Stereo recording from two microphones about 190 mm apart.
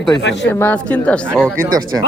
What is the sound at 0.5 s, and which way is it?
A man's voice, 10° left (ahead or behind).